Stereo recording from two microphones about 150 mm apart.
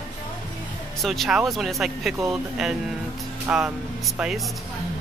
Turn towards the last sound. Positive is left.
turn(degrees=0)  # may be behind; listen again after turning